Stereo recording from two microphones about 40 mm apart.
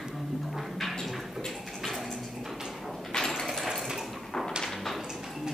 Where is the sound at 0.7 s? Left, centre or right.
Centre.